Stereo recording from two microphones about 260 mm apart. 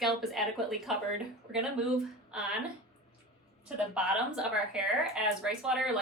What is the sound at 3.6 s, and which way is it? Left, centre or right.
A woman's voice, centre.